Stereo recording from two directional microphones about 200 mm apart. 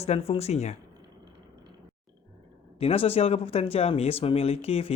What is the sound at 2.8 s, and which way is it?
Speech, 30° left (ahead or behind).